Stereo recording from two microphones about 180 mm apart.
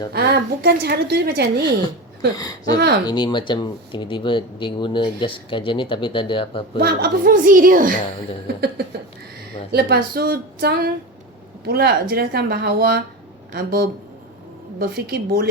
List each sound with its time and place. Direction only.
0.1 s a woman's voice: 60° right (ahead or behind)
2.7 s a woman's voice: 65° right (ahead or behind)
3.1 s speech: 25° left (ahead or behind)
6.7 s a woman's voice: 55° right (ahead or behind)
8.6 s a woman's voice: 65° right (ahead or behind)